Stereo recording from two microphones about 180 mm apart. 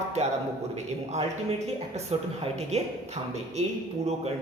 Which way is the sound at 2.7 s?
35° right (ahead or behind).